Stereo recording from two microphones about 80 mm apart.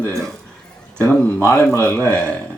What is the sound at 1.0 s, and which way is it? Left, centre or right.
Speech, centre.